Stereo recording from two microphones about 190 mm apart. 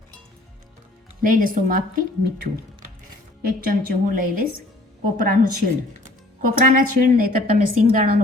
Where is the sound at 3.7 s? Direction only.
50° right (ahead or behind).